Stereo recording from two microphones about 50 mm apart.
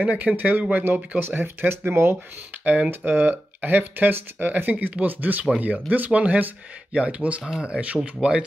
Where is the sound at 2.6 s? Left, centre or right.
Right.